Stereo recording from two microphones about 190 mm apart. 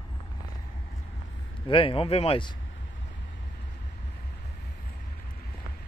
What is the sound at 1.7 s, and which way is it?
Speech, 30° left (ahead or behind).